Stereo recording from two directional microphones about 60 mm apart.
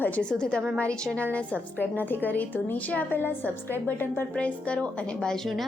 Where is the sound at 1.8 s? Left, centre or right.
Left.